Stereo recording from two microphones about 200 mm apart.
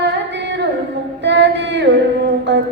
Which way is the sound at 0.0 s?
60° right (ahead or behind).